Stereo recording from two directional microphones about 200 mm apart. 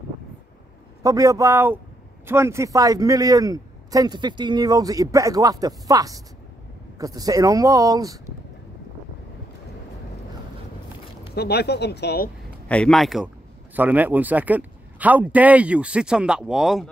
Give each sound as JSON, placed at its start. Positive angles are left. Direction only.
{"t": 1.0, "sound": "a man's voice", "side_deg": -15}
{"t": 11.3, "sound": "speech", "side_deg": 55}
{"t": 12.6, "sound": "a man's voice", "side_deg": 5}